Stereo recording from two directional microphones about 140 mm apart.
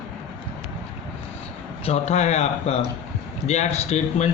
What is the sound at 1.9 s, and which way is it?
Speech, 55° left (ahead or behind).